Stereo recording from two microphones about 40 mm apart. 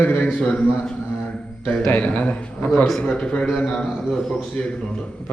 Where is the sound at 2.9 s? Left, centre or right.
Left.